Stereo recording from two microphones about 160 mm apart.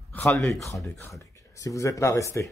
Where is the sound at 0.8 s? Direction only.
20° left (ahead or behind).